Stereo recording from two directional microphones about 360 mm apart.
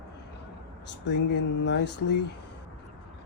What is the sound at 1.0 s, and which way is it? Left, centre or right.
Speech, left.